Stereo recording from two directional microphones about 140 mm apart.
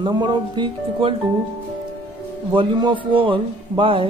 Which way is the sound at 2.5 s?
35° right (ahead or behind).